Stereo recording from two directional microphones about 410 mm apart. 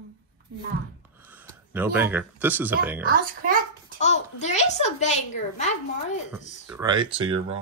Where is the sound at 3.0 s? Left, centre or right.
Right.